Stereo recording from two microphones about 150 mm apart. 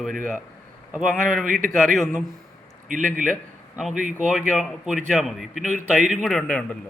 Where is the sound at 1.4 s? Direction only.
65° right (ahead or behind).